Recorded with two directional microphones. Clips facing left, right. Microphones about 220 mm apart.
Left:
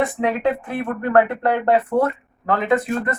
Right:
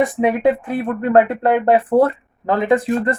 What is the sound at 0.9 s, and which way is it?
Speech, 25° right (ahead or behind).